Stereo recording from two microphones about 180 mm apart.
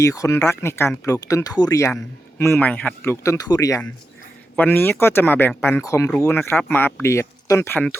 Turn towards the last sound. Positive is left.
turn(degrees=10)  # may be behind; listen again after turning